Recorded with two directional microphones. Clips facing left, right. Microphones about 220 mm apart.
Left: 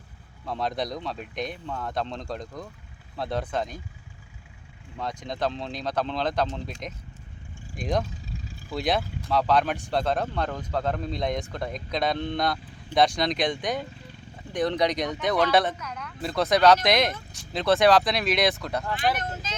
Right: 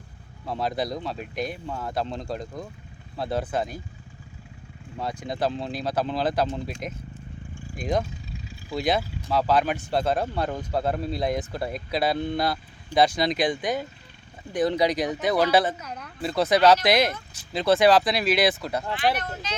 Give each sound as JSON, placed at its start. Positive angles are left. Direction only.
{"t": 0.4, "sound": "speech", "side_deg": -5}
{"t": 4.9, "sound": "speech", "side_deg": -10}
{"t": 7.8, "sound": "speech", "side_deg": 0}
{"t": 15.8, "sound": "a sound", "side_deg": -35}
{"t": 16.2, "sound": "speech", "side_deg": 0}